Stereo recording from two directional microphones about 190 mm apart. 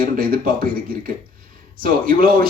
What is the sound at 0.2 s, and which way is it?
Speech, 50° right (ahead or behind).